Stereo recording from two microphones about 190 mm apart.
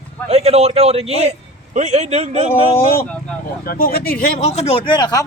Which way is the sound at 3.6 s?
50° left (ahead or behind).